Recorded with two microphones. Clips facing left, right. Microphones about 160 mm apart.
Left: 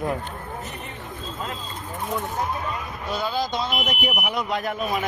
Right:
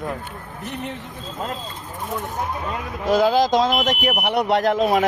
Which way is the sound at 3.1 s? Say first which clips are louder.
Right 10 dB; 90° right.